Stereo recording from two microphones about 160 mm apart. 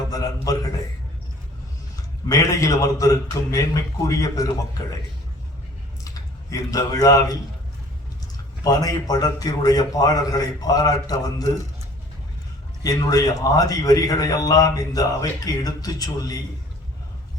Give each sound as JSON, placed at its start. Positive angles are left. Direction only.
{"t": 0.1, "sound": "a sound", "side_deg": 20}
{"t": 2.3, "sound": "a man's voice", "side_deg": 20}
{"t": 6.1, "sound": "speech", "side_deg": 20}
{"t": 8.6, "sound": "a man's voice", "side_deg": 25}
{"t": 12.8, "sound": "a man's voice", "side_deg": 20}